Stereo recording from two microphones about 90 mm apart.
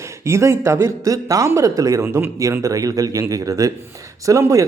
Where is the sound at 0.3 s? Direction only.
30° right (ahead or behind).